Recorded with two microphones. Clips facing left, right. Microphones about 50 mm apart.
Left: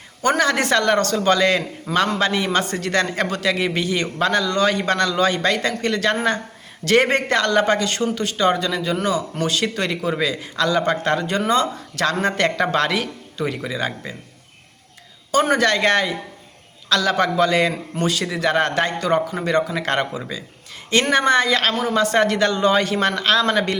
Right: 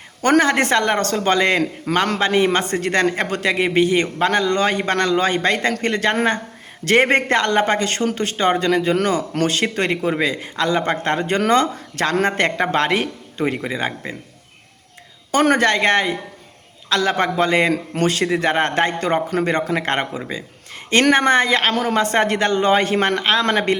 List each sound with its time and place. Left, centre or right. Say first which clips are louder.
0.2 s a man's voice: right 3 dB; right
15.3 s a man's voice: right 2 dB; right
17.7 s a man's voice: right 3 dB; right